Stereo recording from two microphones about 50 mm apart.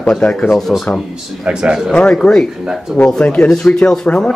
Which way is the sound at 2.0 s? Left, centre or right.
Centre.